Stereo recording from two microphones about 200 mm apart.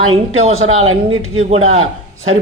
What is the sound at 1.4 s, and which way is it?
Speech, 35° right (ahead or behind).